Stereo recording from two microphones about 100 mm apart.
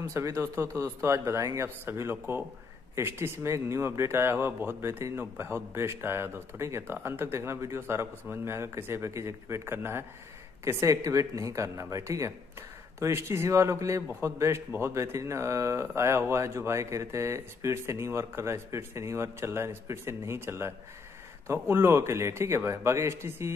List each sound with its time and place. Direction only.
0.0 s speech: 30° right (ahead or behind)